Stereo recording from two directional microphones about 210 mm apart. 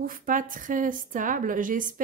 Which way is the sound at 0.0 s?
40° right (ahead or behind).